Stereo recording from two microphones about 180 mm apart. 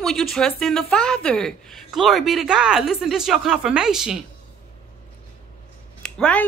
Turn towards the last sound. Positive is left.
turn(degrees=5)  # may be behind; listen again after turning